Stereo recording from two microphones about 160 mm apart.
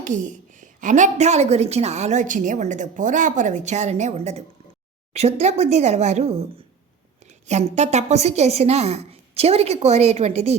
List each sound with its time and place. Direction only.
0.0 s a woman's voice: 50° right (ahead or behind)
7.4 s a woman's voice: 45° right (ahead or behind)